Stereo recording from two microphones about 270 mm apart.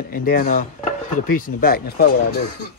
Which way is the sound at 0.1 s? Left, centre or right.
Left.